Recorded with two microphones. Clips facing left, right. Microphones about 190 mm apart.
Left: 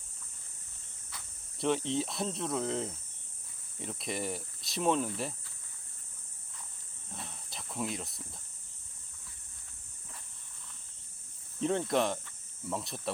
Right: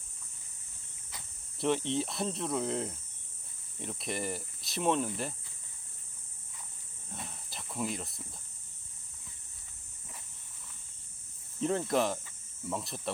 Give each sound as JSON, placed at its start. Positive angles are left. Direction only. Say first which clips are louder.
{"t": 1.5, "sound": "speech", "louder": "even", "side_deg": 0}
{"t": 7.1, "sound": "a sound", "louder": "right 1 dB", "side_deg": 0}
{"t": 11.6, "sound": "cricket", "louder": "even", "side_deg": 0}